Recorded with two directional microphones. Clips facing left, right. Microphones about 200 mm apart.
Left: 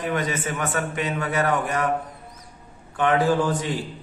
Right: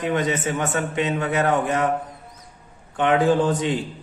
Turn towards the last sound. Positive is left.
turn(degrees=-20)  # may be behind; listen again after turning